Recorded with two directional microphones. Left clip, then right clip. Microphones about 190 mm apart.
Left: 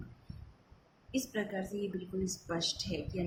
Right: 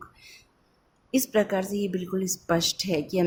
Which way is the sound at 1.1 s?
55° right (ahead or behind).